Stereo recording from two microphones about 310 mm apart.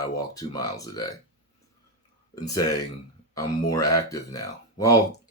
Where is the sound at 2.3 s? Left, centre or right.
Centre.